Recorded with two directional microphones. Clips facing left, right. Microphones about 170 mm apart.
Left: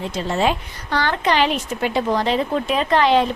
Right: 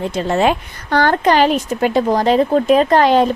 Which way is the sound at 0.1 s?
55° right (ahead or behind).